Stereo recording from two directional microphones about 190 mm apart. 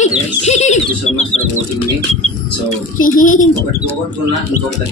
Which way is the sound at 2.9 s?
45° left (ahead or behind).